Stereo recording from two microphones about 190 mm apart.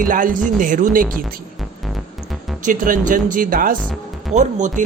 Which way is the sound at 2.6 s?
45° right (ahead or behind).